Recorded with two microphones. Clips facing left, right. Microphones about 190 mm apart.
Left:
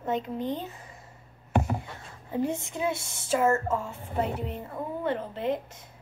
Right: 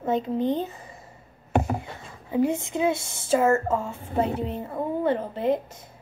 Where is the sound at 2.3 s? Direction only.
15° right (ahead or behind).